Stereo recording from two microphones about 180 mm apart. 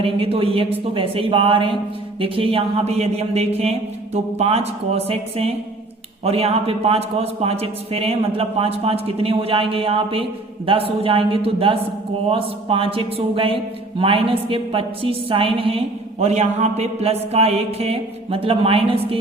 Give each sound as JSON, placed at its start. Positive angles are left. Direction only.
{"t": 0.0, "sound": "a man's voice", "side_deg": -30}